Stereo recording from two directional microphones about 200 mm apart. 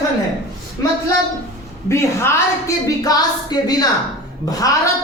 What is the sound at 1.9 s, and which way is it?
A woman's voice, 15° left (ahead or behind).